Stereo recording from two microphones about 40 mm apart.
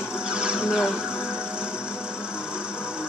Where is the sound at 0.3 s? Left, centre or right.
Right.